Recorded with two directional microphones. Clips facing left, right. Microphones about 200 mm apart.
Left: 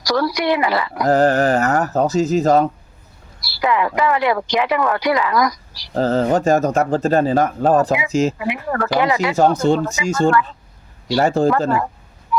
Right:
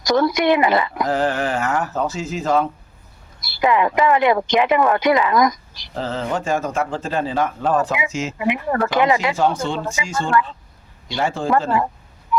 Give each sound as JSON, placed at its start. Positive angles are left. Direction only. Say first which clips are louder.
{"t": 0.0, "sound": "speech", "louder": "right 2 dB", "side_deg": -20}
{"t": 1.0, "sound": "speech", "louder": "left 6 dB", "side_deg": 40}
{"t": 3.6, "sound": "speech", "louder": "right 1 dB", "side_deg": -20}
{"t": 5.9, "sound": "speech", "louder": "left 8 dB", "side_deg": 40}
{"t": 8.4, "sound": "speech", "louder": "right 2 dB", "side_deg": -20}
{"t": 9.3, "sound": "speech", "louder": "left 5 dB", "side_deg": 40}
{"t": 12.3, "sound": "a sound", "louder": "even", "side_deg": -20}